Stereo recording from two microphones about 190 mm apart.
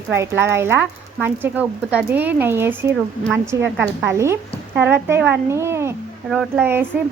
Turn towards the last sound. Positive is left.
turn(degrees=-10)  # may be behind; listen again after turning